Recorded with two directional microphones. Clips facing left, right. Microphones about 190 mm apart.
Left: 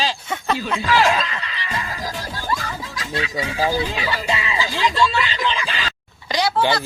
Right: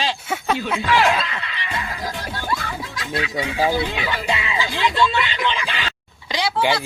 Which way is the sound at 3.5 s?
20° right (ahead or behind).